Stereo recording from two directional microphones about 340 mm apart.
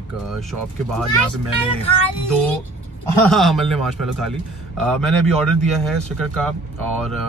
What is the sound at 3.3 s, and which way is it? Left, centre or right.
Speech, centre.